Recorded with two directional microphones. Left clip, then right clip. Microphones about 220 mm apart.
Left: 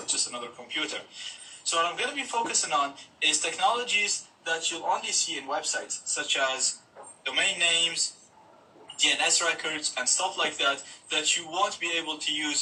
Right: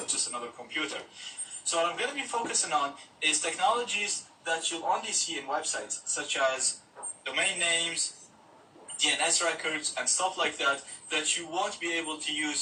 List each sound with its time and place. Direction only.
0.0 s a sound: 30° left (ahead or behind)
1.7 s speech: 25° left (ahead or behind)
9.0 s speech: 25° left (ahead or behind)